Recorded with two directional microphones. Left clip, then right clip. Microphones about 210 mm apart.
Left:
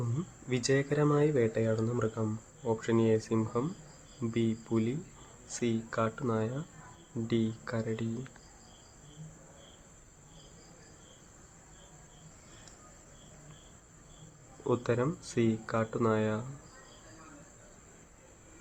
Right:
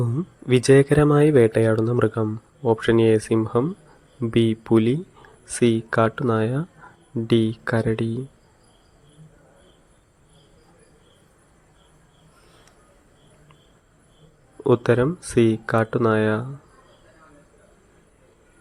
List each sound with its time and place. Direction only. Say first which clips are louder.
0.0 s speech: right 12 dB; 35° right (ahead or behind)
14.6 s speech: right 12 dB; 35° right (ahead or behind)